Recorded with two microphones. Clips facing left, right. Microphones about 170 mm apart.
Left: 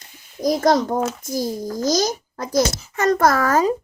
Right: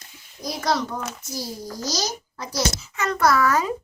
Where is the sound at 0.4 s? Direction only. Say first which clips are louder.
Left 8 dB; 45° left (ahead or behind).